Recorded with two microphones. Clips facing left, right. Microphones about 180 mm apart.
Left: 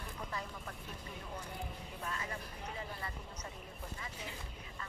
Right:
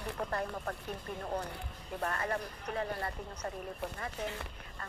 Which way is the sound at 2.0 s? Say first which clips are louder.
Right 9 dB; 65° right (ahead or behind).